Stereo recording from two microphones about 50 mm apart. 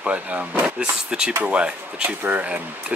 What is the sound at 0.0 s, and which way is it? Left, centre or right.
Speech, right.